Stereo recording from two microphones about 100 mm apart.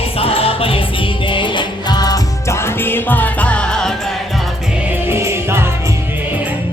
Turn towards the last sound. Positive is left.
turn(degrees=-25)  # may be behind; listen again after turning